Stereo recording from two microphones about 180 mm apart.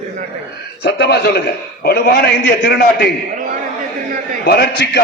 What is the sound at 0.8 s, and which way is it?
A man's voice, 65° left (ahead or behind).